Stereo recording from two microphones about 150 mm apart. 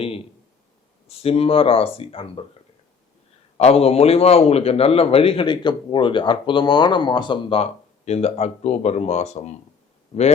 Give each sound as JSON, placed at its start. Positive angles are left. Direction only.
{"t": 1.2, "sound": "a man's voice", "side_deg": 40}
{"t": 3.6, "sound": "a man's voice", "side_deg": 40}
{"t": 7.6, "sound": "speech", "side_deg": 45}